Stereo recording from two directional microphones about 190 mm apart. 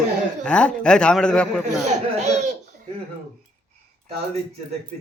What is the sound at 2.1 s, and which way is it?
Baby laughter, 35° right (ahead or behind).